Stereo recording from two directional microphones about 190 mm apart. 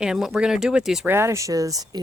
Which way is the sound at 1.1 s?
15° right (ahead or behind).